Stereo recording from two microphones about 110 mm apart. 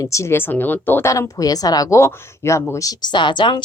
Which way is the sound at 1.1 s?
30° left (ahead or behind).